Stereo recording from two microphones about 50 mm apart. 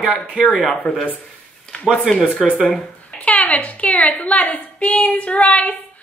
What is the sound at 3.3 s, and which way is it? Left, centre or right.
A woman's voice, left.